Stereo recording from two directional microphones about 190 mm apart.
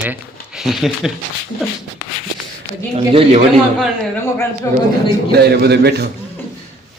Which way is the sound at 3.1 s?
30° right (ahead or behind).